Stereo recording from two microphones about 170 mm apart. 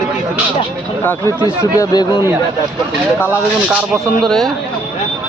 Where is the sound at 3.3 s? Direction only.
10° right (ahead or behind).